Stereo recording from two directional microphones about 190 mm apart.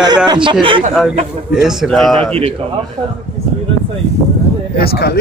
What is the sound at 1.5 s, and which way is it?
Speech, 5° right (ahead or behind).